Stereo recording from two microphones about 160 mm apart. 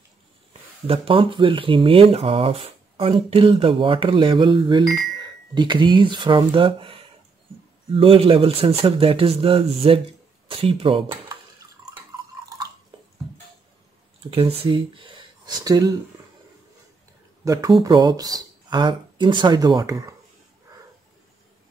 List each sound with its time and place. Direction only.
0.5 s speech: 35° right (ahead or behind)
14.3 s speech: 35° right (ahead or behind)
17.5 s speech: 25° right (ahead or behind)